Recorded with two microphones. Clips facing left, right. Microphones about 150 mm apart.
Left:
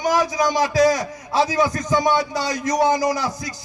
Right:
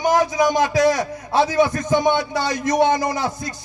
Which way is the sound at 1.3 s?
55° right (ahead or behind).